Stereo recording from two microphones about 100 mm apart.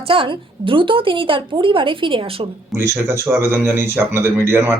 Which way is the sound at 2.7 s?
25° right (ahead or behind).